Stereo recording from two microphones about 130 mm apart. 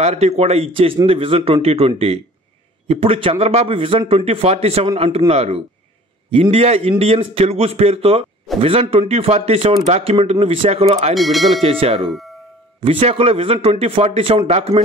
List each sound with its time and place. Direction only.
0.0 s a man's voice: 55° right (ahead or behind)
11.1 s speech: centre (ahead or behind)
11.6 s a man's voice: 45° right (ahead or behind)